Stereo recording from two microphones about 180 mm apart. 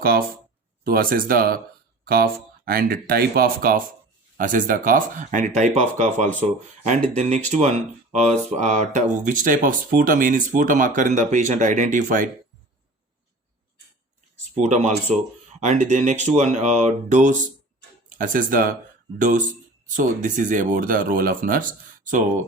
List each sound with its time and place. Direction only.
0.0 s speech: 55° right (ahead or behind)
14.5 s speech: 40° right (ahead or behind)
20.0 s speech: 45° right (ahead or behind)